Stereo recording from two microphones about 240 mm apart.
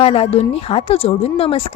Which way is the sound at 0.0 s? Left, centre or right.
Left.